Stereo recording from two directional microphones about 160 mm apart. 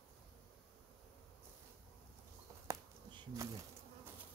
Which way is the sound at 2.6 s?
20° right (ahead or behind).